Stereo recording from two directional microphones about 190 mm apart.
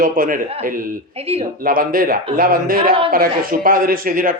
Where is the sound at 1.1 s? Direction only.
30° right (ahead or behind).